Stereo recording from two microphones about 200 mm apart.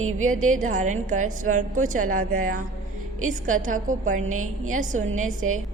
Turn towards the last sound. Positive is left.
turn(degrees=-40)  # may be behind; listen again after turning